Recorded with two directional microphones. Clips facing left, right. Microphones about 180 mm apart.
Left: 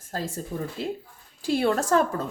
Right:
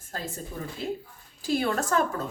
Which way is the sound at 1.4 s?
30° left (ahead or behind).